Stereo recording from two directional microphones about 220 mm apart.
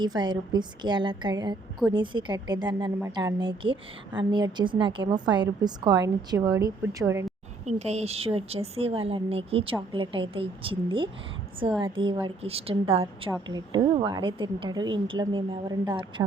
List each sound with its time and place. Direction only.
0.0 s a woman's voice: 20° right (ahead or behind)
7.6 s a woman's voice: 30° right (ahead or behind)